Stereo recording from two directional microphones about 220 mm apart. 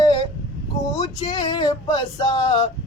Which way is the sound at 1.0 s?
25° left (ahead or behind).